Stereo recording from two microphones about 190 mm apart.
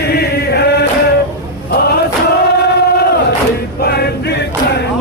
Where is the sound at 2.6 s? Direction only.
60° left (ahead or behind).